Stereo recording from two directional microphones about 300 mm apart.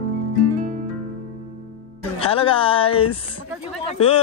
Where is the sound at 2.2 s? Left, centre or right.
Centre.